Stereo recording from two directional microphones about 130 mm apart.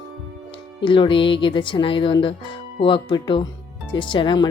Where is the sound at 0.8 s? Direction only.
40° left (ahead or behind).